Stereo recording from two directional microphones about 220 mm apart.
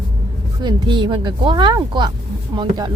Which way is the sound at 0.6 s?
20° right (ahead or behind).